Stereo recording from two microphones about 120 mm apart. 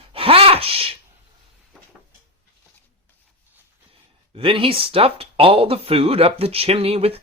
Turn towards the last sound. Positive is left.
turn(degrees=-55)  # may be behind; listen again after turning